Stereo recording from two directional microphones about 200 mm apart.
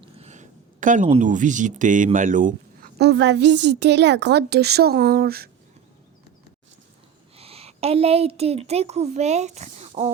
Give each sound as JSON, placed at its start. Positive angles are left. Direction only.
{"t": 0.0, "sound": "a sound", "side_deg": -35}
{"t": 2.1, "sound": "a woman's voice", "side_deg": -40}
{"t": 7.3, "sound": "a woman's voice", "side_deg": -30}